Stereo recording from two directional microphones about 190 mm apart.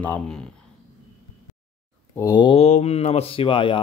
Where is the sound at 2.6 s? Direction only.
35° left (ahead or behind).